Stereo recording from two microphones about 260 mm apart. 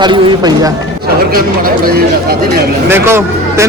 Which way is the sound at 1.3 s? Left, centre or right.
Right.